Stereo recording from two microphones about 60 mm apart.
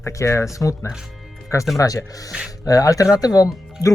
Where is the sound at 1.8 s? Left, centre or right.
Left.